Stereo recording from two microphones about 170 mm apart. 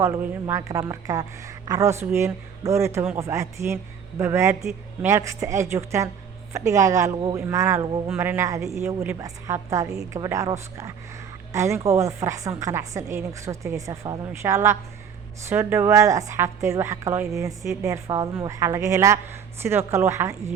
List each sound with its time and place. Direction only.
0.0 s a woman's voice: 15° right (ahead or behind)